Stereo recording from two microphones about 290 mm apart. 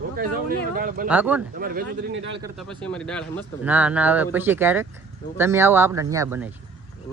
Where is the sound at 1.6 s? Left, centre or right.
Right.